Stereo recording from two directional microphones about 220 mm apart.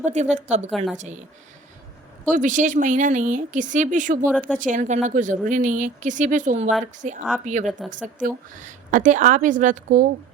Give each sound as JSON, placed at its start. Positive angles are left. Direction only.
{"t": 0.0, "sound": "a woman's voice", "side_deg": -30}
{"t": 2.3, "sound": "a woman's voice", "side_deg": -35}